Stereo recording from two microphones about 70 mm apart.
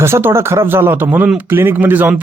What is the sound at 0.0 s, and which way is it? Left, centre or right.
Speech, right.